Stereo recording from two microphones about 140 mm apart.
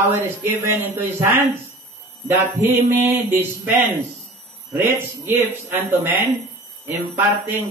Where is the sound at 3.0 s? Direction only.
15° right (ahead or behind).